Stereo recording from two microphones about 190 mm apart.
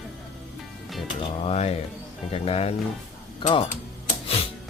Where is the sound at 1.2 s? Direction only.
35° left (ahead or behind).